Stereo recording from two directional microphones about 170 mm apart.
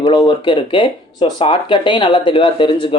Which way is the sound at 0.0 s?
25° left (ahead or behind).